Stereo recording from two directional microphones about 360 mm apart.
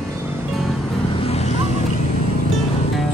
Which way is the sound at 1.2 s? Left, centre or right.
Centre.